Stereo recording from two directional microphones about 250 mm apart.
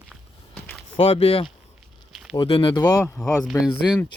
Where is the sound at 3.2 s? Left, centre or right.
Centre.